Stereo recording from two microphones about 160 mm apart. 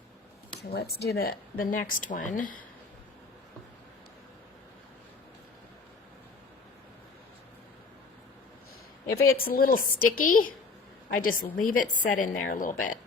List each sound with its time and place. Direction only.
0.7 s speech: 80° left; by 2.6 s 55° left (ahead or behind)
9.0 s speech: 70° left (ahead or behind)